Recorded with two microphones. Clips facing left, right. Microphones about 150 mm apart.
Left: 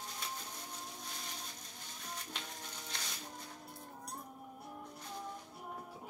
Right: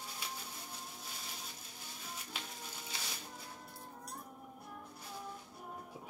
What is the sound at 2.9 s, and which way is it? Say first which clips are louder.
Music: even; 5° right (ahead or behind).